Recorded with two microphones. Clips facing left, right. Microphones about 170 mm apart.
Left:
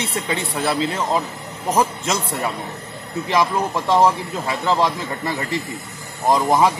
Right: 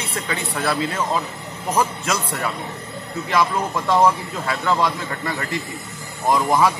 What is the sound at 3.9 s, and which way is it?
Speech, 20° left (ahead or behind).